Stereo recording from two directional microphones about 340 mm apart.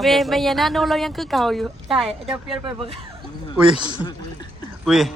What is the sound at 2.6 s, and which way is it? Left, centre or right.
Speech, centre.